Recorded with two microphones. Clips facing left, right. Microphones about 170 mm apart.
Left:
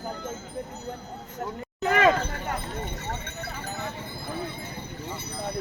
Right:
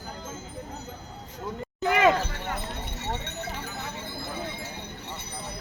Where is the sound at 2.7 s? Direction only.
70° right (ahead or behind).